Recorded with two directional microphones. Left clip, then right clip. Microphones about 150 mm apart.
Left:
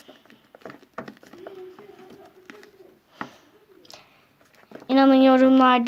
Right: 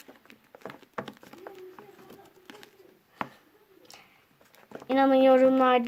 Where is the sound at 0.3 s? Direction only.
25° right (ahead or behind).